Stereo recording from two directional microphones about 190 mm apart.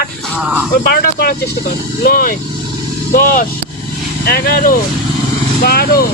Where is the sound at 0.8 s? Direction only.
55° left (ahead or behind).